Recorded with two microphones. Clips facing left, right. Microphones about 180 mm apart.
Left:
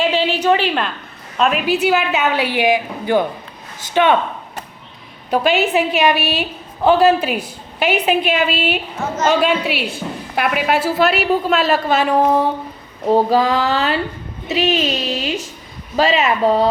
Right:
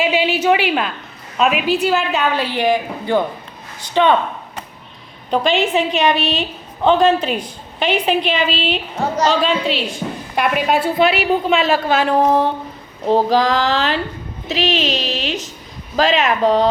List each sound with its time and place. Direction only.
0.0 s a woman's voice: 10° right (ahead or behind); by 4.2 s 10° left (ahead or behind)
5.3 s a woman's voice: 5° left (ahead or behind)
9.0 s a sound: 35° right (ahead or behind)
9.4 s a woman's voice: 10° left (ahead or behind)